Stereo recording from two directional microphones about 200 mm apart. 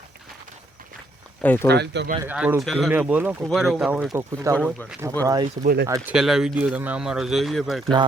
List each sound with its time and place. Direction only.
1.4 s speech: 10° left (ahead or behind)
1.7 s speech: 60° right (ahead or behind)
2.2 s speech: 10° right (ahead or behind)
4.1 s speech: 15° right (ahead or behind)
6.1 s speech: centre (ahead or behind)